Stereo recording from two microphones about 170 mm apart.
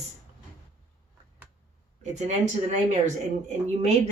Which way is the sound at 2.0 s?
45° right (ahead or behind).